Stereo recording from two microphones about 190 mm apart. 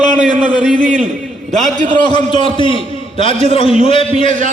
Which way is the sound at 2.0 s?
25° left (ahead or behind).